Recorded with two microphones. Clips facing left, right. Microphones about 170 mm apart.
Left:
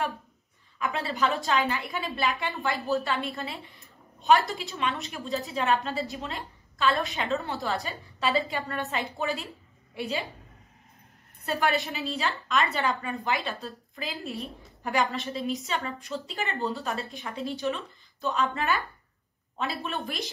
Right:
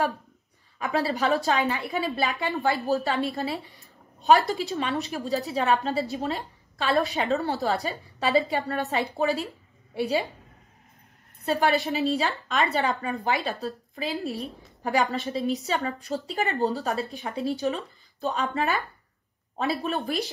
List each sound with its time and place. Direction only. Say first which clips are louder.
0.7 s a woman's voice: right 3 dB; 40° right (ahead or behind)
11.4 s a woman's voice: right 4 dB; 35° right (ahead or behind)
14.8 s a woman's voice: right 3 dB; 35° right (ahead or behind)